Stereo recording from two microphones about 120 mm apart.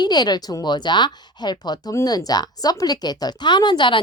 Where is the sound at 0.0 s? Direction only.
35° left (ahead or behind).